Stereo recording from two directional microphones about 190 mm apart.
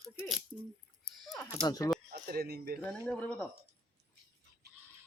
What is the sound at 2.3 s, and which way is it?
Speech, 55° right (ahead or behind).